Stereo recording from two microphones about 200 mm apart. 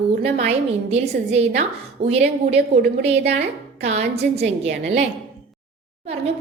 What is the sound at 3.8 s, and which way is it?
A woman's voice, 35° right (ahead or behind).